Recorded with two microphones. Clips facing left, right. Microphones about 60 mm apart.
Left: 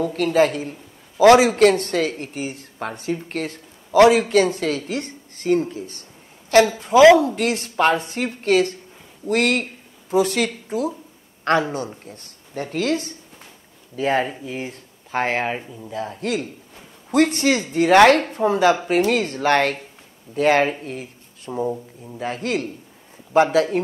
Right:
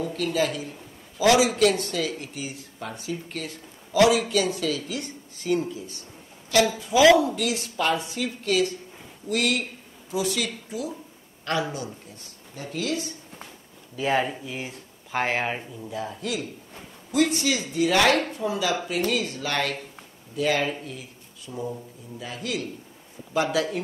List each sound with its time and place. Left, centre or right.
0.0 s a man's voice: left